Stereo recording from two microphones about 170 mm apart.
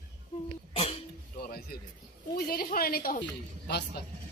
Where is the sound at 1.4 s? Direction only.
65° left (ahead or behind).